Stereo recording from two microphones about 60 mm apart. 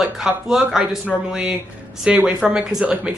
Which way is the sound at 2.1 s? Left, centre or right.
Right.